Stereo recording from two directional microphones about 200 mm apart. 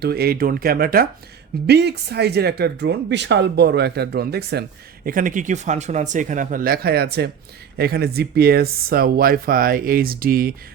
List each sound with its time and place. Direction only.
0.0 s speech: 50° right (ahead or behind)
5.0 s speech: 40° right (ahead or behind)